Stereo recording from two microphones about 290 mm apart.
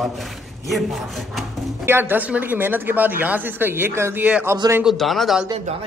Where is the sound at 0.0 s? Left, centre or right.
Centre.